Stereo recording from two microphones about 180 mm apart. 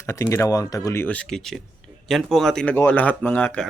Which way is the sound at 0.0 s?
15° left (ahead or behind).